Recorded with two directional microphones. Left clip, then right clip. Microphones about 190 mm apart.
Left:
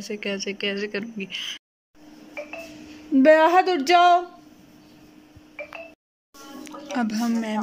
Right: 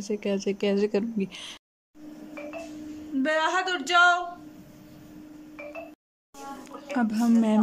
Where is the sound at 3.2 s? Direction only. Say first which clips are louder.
Left 9 dB; 30° left (ahead or behind).